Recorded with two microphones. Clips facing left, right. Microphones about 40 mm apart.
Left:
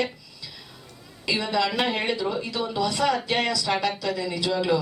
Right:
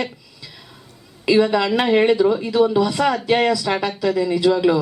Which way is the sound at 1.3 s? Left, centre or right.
Centre.